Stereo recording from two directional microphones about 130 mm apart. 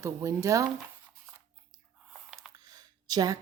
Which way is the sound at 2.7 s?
30° right (ahead or behind).